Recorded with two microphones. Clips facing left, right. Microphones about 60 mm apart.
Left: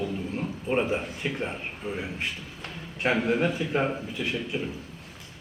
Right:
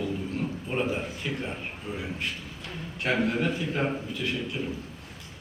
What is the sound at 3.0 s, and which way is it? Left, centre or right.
Speech, centre.